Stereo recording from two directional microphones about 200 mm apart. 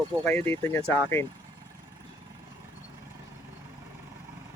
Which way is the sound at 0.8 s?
15° right (ahead or behind).